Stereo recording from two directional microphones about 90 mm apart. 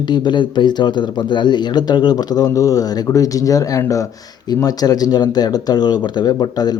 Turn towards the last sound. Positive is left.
turn(degrees=50)  # may be behind; listen again after turning